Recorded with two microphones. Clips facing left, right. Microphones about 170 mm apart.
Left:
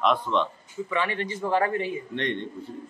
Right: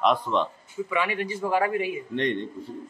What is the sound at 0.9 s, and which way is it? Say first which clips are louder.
Speech: right 1 dB; 10° right (ahead or behind).